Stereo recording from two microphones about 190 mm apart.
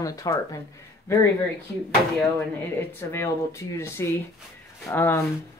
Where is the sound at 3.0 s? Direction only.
15° left (ahead or behind).